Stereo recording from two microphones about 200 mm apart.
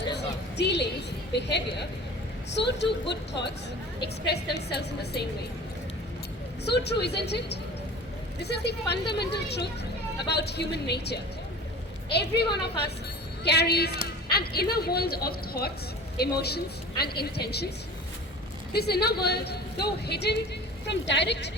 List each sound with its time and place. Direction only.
0.1 s a sound: 60° left (ahead or behind)
1.4 s speech: 60° left (ahead or behind)
6.7 s a woman's voice: 55° left (ahead or behind)
18.7 s a woman's voice: 55° left (ahead or behind)